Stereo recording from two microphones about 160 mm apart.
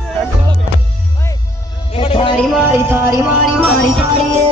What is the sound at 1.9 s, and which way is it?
Music, 35° left (ahead or behind).